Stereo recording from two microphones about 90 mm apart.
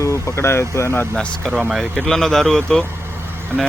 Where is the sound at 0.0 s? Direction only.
35° left (ahead or behind).